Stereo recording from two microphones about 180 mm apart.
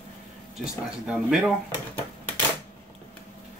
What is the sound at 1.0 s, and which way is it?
Speech, 5° right (ahead or behind).